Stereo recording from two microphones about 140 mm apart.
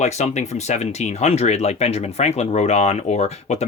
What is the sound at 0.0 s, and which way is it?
Speech, 55° left (ahead or behind).